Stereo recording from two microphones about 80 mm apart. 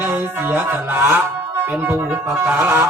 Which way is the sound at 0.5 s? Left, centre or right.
Right.